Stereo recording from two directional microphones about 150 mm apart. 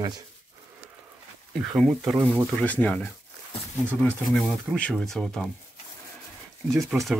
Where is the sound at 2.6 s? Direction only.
10° left (ahead or behind).